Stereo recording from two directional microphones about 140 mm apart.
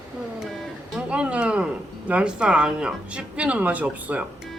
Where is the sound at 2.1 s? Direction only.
10° right (ahead or behind).